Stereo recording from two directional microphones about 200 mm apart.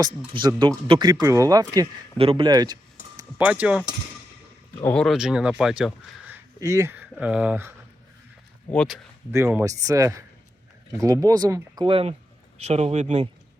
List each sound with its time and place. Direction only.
0.3 s speech: 20° right (ahead or behind)
3.2 s speech: 10° right (ahead or behind)
4.8 s speech: 5° left (ahead or behind)
8.7 s speech: 5° left (ahead or behind)
9.3 s speech: 10° right (ahead or behind); by 13.2 s 35° right (ahead or behind)